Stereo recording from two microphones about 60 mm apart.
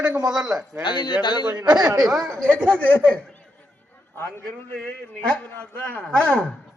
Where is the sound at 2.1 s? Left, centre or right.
Centre.